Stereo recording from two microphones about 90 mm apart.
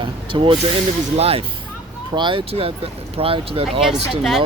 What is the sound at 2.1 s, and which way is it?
Speech, 65° right (ahead or behind).